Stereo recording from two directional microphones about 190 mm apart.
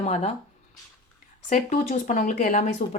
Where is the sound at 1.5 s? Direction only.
40° left (ahead or behind).